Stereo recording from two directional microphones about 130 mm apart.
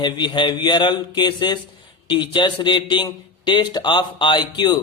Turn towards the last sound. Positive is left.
turn(degrees=35)  # may be behind; listen again after turning